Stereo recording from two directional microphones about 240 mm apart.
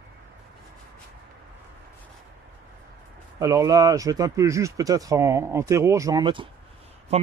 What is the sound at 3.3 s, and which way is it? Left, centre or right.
Speech, centre.